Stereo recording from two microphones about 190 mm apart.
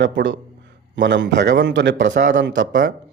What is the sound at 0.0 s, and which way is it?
A man's voice, 70° right (ahead or behind).